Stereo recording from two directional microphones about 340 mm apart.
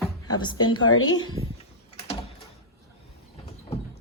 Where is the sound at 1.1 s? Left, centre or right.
Centre.